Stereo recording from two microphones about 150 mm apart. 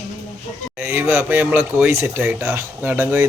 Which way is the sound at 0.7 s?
15° right (ahead or behind).